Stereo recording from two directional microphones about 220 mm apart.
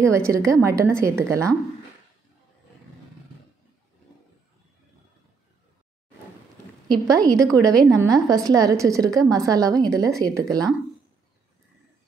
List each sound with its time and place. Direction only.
0.1 s a woman's voice: 15° right (ahead or behind)
6.9 s a woman's voice: 15° right (ahead or behind)